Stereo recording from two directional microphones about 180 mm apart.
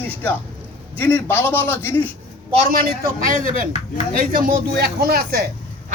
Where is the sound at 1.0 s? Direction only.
10° left (ahead or behind).